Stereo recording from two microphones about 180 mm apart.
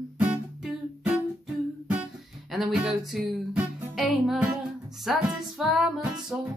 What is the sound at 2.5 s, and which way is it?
Music, centre (ahead or behind).